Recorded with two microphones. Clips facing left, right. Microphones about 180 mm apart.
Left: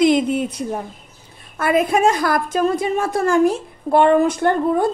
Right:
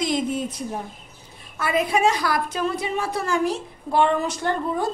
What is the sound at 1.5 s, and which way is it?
A woman's voice, 50° left (ahead or behind).